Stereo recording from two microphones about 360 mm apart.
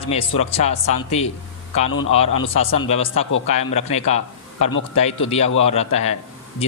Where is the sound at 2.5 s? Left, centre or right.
Centre.